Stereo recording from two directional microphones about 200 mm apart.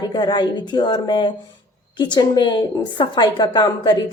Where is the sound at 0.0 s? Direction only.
20° left (ahead or behind).